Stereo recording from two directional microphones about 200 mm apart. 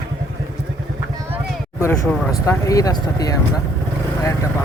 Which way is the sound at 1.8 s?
10° left (ahead or behind).